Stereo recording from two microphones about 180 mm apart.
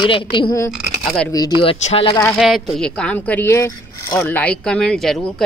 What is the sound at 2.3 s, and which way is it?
Speech, centre (ahead or behind).